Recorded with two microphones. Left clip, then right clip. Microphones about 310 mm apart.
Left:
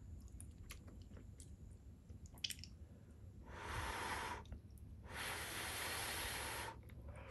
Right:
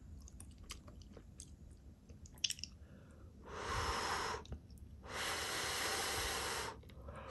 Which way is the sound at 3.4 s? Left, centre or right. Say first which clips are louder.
Right 6 dB; centre.